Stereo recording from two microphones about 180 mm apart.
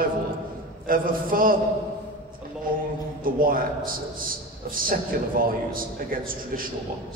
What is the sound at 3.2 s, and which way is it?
A man's voice, 50° right (ahead or behind).